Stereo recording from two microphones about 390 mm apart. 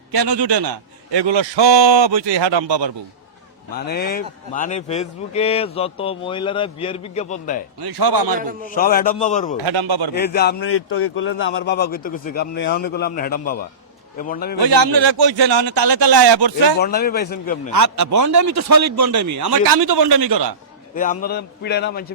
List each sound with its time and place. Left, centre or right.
0.1 s a man's voice: right
3.8 s speech: left
7.8 s a man's voice: right
8.7 s speech: left
9.6 s speech: right
10.2 s speech: left
14.6 s speech: right
16.8 s speech: left
17.7 s a man's voice: right
19.5 s speech: right
20.9 s speech: left